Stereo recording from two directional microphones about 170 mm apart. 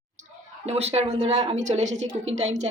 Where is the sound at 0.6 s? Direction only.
35° right (ahead or behind).